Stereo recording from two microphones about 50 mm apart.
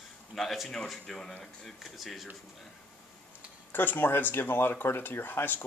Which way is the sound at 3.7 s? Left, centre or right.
Left.